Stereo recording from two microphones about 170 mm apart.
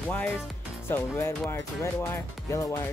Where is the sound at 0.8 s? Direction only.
15° left (ahead or behind).